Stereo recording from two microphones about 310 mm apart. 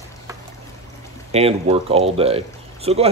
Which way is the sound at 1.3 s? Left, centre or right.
Centre.